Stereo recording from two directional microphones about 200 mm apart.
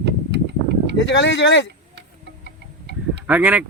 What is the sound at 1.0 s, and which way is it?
Speech, 65° left (ahead or behind).